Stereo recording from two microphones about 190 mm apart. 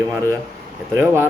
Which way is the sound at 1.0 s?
10° right (ahead or behind).